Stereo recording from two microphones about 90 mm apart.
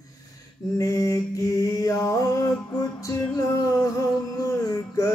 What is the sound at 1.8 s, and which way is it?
Music, 40° left (ahead or behind).